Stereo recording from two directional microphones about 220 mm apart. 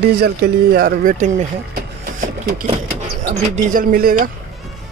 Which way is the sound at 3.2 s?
35° right (ahead or behind).